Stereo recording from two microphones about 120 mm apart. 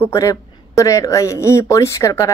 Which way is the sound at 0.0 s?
25° left (ahead or behind).